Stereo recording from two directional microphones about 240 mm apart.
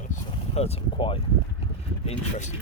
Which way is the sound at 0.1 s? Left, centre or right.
Left.